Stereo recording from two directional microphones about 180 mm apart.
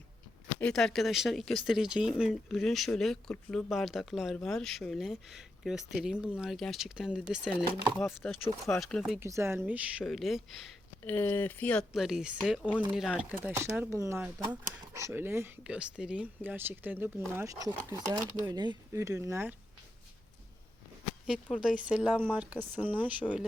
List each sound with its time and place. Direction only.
0.6 s speech: 5° left (ahead or behind)
9.2 s speech: 15° right (ahead or behind)
11.0 s speech: 10° left (ahead or behind); by 19.5 s 15° right (ahead or behind)
21.5 s speech: 5° right (ahead or behind)